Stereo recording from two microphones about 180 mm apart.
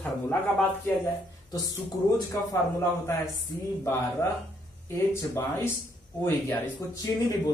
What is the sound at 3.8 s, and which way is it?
Speech, 15° left (ahead or behind).